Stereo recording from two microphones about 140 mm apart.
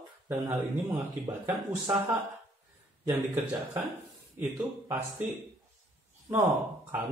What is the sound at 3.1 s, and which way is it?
Speech, 15° right (ahead or behind).